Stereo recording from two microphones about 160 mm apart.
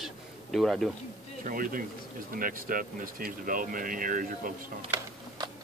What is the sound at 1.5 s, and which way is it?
Speech, 60° right (ahead or behind).